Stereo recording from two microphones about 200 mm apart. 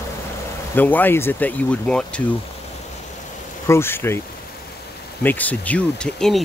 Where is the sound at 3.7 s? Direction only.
10° left (ahead or behind).